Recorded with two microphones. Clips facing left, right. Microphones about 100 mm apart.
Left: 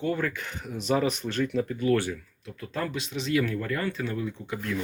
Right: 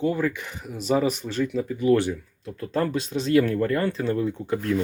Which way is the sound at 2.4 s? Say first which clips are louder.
Right 7 dB; 35° right (ahead or behind).